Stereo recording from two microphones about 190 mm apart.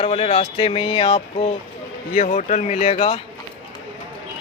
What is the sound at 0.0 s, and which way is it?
Speech, 30° left (ahead or behind).